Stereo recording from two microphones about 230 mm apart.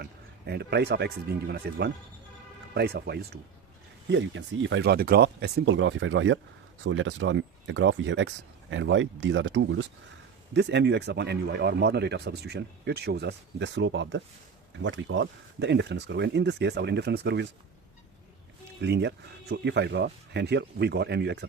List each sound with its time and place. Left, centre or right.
0.0 s speech: right
18.8 s speech: right